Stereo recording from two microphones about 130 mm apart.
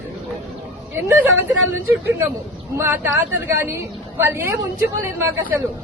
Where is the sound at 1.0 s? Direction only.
20° right (ahead or behind).